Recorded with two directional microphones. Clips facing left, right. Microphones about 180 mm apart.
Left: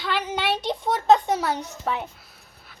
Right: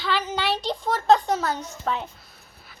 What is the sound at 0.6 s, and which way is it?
A child's voice, 20° left (ahead or behind).